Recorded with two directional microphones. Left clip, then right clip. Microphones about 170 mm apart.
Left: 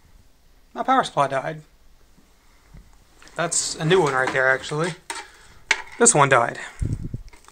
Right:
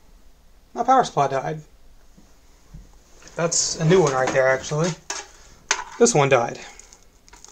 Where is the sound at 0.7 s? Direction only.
5° left (ahead or behind).